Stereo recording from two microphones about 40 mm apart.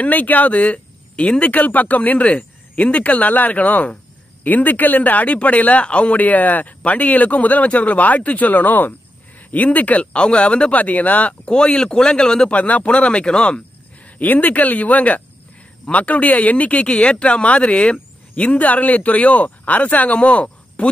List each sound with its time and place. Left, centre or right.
0.0 s speech: left
10.1 s speech: left
10.8 s speech: left
11.4 s speech: left
12.4 s speech: left
14.1 s speech: left